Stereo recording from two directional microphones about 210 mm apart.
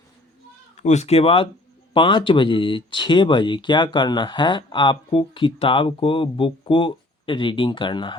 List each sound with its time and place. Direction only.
0.8 s speech: 35° left (ahead or behind)